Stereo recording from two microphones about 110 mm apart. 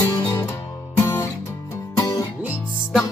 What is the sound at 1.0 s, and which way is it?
Music, 25° left (ahead or behind).